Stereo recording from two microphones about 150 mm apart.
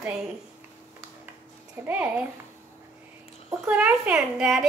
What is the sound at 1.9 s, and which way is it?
Speech, 10° right (ahead or behind).